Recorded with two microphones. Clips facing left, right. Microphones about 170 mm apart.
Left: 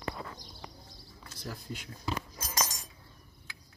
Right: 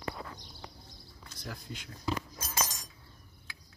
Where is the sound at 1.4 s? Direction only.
5° left (ahead or behind).